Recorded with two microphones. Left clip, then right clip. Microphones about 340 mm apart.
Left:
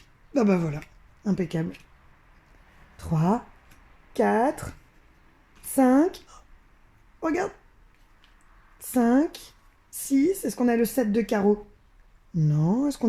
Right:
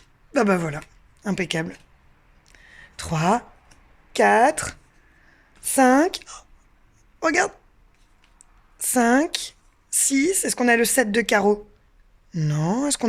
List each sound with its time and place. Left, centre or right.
0.3 s speech: right
0.8 s speech: right
2.9 s a woman's voice: right
5.7 s a woman's voice: right
8.9 s a woman's voice: right
12.5 s a woman's voice: right